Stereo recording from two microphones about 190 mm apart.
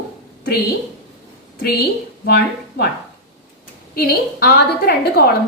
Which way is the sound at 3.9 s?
55° left (ahead or behind).